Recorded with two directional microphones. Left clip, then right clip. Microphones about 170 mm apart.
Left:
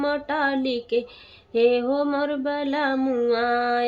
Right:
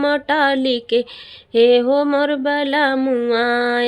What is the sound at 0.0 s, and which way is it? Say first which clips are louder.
Mantra: right 7 dB; 35° right (ahead or behind).